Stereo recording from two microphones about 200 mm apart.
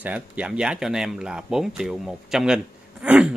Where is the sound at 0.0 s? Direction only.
5° right (ahead or behind).